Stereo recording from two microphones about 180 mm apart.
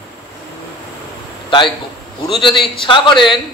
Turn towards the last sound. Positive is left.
turn(degrees=25)  # may be behind; listen again after turning